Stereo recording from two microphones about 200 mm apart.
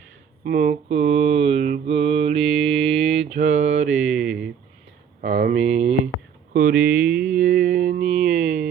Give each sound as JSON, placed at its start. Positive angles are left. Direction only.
{"t": 0.4, "sound": "mantra", "side_deg": -35}
{"t": 4.2, "sound": "a sound", "side_deg": 0}
{"t": 5.2, "sound": "speech", "side_deg": -35}
{"t": 6.1, "sound": "a sound", "side_deg": 90}
{"t": 6.5, "sound": "speech", "side_deg": -40}
{"t": 7.0, "sound": "mantra", "side_deg": -5}
{"t": 7.3, "sound": "mantra", "side_deg": -40}